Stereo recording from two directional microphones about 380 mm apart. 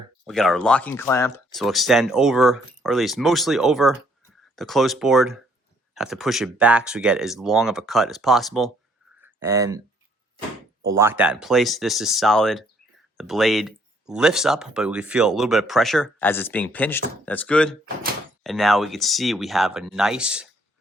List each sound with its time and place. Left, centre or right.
0.3 s speech: centre
10.9 s speech: centre